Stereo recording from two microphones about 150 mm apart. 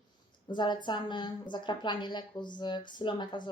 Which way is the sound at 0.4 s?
30° left (ahead or behind).